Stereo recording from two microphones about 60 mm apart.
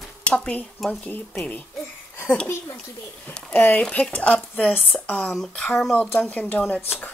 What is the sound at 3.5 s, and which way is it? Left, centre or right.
Speech, left.